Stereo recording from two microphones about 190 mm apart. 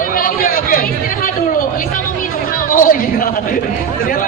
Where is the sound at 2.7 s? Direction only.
45° left (ahead or behind).